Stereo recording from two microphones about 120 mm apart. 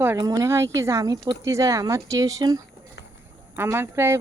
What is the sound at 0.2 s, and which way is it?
Speech, 30° right (ahead or behind).